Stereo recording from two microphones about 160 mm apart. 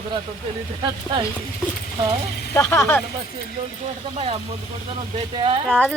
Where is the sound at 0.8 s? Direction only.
30° right (ahead or behind).